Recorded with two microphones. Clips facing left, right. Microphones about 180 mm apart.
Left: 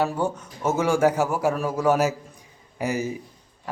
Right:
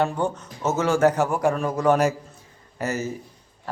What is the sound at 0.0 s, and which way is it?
A man's voice, 5° left (ahead or behind).